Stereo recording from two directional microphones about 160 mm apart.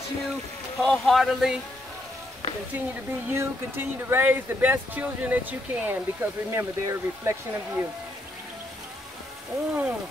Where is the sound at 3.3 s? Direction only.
15° right (ahead or behind).